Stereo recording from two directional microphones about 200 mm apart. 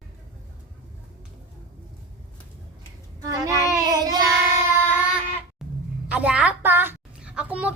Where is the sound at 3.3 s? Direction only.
15° right (ahead or behind).